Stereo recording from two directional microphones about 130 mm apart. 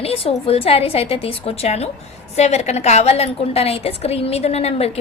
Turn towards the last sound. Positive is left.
turn(degrees=50)  # may be behind; listen again after turning